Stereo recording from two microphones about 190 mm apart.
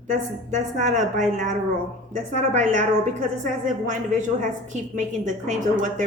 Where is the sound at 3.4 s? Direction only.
40° right (ahead or behind).